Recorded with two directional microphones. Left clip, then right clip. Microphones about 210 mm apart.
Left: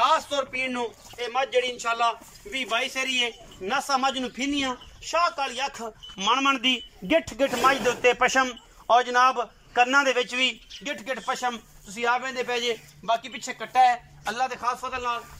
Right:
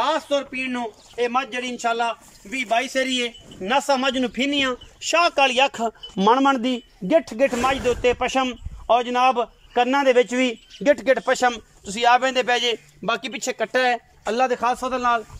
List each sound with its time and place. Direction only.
0.0 s a man's voice: 40° right (ahead or behind); by 15.2 s 55° right (ahead or behind)